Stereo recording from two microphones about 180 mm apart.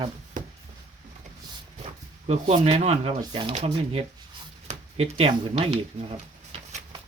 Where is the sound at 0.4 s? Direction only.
45° right (ahead or behind).